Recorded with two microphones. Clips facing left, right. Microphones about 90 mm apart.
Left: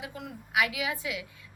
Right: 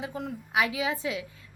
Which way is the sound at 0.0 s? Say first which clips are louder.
Right 6 dB; 30° right (ahead or behind).